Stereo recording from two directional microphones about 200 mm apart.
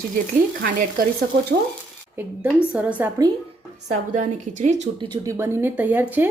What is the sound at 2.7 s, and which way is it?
Speech, 5° right (ahead or behind).